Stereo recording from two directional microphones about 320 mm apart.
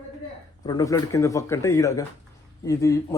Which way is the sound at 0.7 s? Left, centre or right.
Centre.